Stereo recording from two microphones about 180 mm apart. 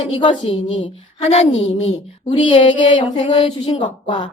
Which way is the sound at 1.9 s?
30° left (ahead or behind).